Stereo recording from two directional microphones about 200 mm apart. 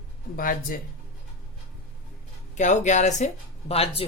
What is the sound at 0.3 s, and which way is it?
Speech, 45° left (ahead or behind).